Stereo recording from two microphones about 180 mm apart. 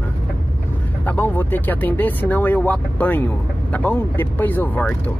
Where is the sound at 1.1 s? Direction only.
10° left (ahead or behind).